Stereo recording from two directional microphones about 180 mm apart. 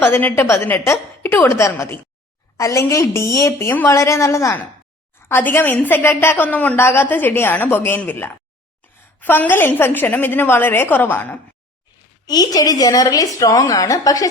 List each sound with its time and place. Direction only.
0.1 s a woman's voice: 10° left (ahead or behind)
12.2 s a woman's voice: 20° left (ahead or behind)